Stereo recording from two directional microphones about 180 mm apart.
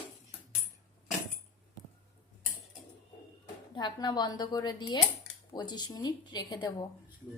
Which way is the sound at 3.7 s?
25° left (ahead or behind).